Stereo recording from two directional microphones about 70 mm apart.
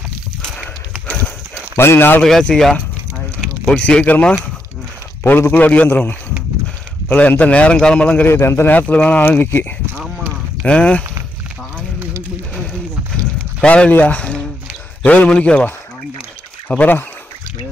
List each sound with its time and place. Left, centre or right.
0.6 s horse: centre
1.5 s clip-clop: left
2.2 s a man's voice: centre
5.2 s a man's voice: left
8.3 s a man's voice: left
8.7 s speech: left
9.9 s clip-clop: centre
10.6 s a man's voice: centre
13.6 s a man's voice: centre
16.6 s speech: left